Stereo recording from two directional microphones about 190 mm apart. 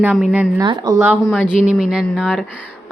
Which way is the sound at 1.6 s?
5° right (ahead or behind).